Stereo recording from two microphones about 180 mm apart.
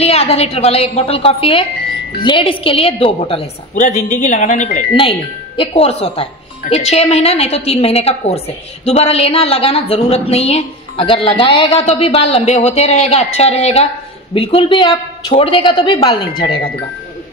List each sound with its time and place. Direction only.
0.0 s a woman's voice: 35° left (ahead or behind)
3.7 s speech: 45° left (ahead or behind)
4.7 s a woman's voice: 30° left (ahead or behind)